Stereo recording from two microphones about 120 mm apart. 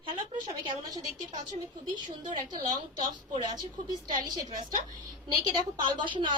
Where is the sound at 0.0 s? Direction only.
40° right (ahead or behind).